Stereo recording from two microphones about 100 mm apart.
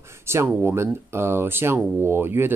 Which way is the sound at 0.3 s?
25° right (ahead or behind).